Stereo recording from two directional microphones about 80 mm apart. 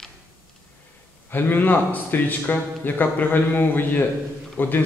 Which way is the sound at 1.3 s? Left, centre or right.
Left.